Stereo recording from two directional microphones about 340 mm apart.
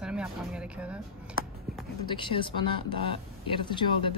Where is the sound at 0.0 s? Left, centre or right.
Centre.